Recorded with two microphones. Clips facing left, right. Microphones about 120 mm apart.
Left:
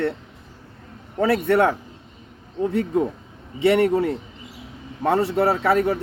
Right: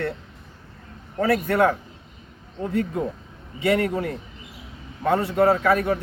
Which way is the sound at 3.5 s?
30° left (ahead or behind).